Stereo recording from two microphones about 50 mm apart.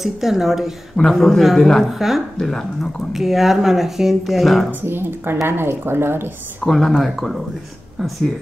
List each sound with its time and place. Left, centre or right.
0.0 s speech: centre
3.1 s speech: centre
4.8 s speech: right
6.6 s speech: centre